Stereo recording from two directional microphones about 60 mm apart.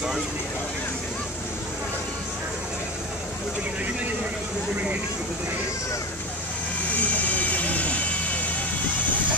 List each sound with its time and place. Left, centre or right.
6.9 s vehicle: left